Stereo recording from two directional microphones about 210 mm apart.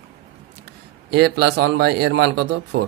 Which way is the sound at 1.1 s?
50° right (ahead or behind).